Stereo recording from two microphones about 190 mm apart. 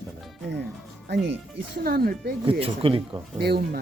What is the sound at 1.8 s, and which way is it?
Speech, 55° right (ahead or behind).